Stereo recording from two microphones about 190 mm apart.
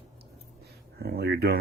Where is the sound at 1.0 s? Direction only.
55° right (ahead or behind).